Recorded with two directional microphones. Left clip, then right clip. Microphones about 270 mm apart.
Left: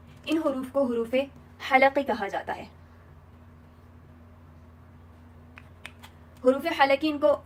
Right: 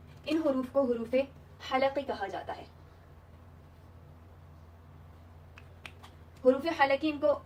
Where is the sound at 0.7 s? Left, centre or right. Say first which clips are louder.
Left 3 dB; left.